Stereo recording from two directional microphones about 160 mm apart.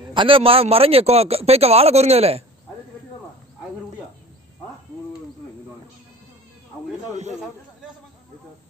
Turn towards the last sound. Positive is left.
turn(degrees=-45)  # may be behind; listen again after turning